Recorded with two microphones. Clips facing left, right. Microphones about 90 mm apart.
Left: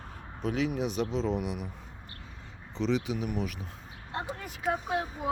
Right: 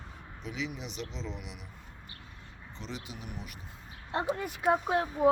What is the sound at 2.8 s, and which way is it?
Speech, 85° left.